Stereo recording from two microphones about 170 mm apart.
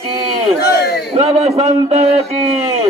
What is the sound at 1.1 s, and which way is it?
A man's voice, 35° right (ahead or behind).